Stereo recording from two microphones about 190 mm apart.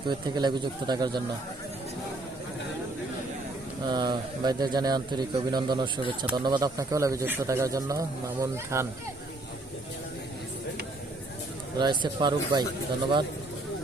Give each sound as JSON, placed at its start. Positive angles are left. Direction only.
{"t": 0.1, "sound": "speech", "side_deg": -25}
{"t": 3.8, "sound": "speech", "side_deg": -25}
{"t": 11.8, "sound": "speech", "side_deg": -25}